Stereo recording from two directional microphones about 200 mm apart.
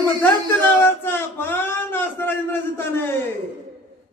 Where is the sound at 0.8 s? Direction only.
10° left (ahead or behind).